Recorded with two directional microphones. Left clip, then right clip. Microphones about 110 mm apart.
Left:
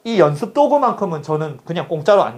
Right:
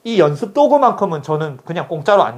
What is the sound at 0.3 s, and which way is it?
Speech, 35° right (ahead or behind).